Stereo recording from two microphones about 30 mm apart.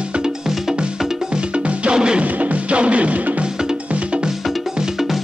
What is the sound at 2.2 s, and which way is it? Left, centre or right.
Music, right.